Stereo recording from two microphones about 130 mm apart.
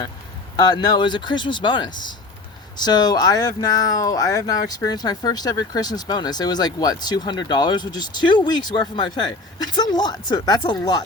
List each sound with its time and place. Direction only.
0.5 s speech: 30° left (ahead or behind)